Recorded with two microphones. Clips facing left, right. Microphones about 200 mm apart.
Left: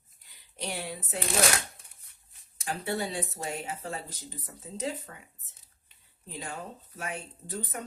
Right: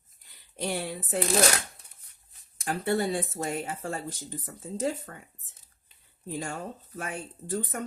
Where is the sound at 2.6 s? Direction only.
50° right (ahead or behind).